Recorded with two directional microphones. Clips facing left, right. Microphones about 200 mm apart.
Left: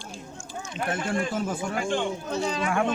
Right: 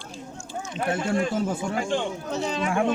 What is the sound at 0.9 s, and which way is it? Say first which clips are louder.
Speech: right 3 dB; 25° right (ahead or behind).